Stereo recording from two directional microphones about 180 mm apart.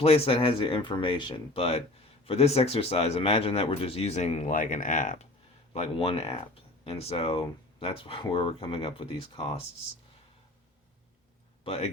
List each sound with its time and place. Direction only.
0.0 s speech: 35° left (ahead or behind)
5.7 s speech: 35° left (ahead or behind)
11.6 s speech: 35° left (ahead or behind)